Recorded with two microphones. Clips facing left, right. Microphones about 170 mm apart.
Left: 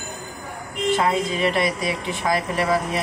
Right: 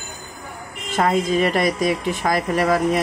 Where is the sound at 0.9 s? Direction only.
45° right (ahead or behind).